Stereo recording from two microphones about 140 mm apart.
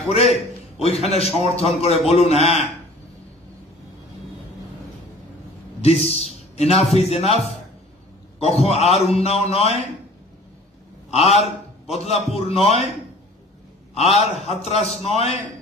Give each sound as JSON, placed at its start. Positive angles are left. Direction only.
{"t": 0.1, "sound": "a man's voice", "side_deg": 50}
{"t": 5.8, "sound": "a man's voice", "side_deg": 50}
{"t": 11.1, "sound": "a man's voice", "side_deg": 50}
{"t": 13.9, "sound": "a man's voice", "side_deg": 50}